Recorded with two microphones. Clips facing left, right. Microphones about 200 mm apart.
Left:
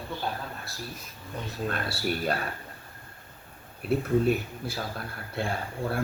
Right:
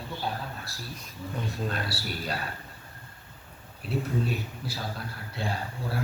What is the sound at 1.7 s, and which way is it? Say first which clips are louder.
Speech: left 4 dB; 55° left (ahead or behind).